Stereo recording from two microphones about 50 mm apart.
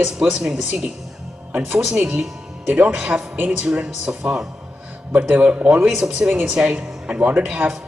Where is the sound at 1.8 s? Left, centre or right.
Centre.